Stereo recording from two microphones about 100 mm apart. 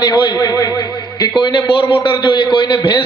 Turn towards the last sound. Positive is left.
turn(degrees=55)  # may be behind; listen again after turning